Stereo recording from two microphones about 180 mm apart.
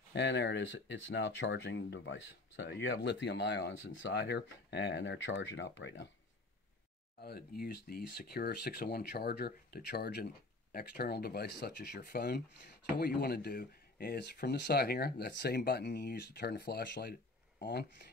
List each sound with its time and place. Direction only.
0.1 s speech: 75° left (ahead or behind)
7.2 s speech: 60° left (ahead or behind)